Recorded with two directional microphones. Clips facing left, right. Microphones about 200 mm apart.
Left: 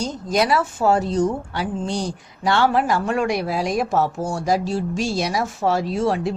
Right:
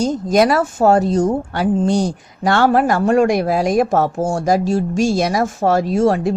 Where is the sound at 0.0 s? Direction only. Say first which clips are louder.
Right 7 dB; 45° right (ahead or behind).